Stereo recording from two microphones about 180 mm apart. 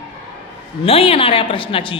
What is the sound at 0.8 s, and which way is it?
A woman's voice, 30° left (ahead or behind).